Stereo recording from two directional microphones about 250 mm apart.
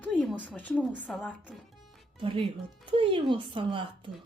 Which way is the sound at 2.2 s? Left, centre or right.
Right.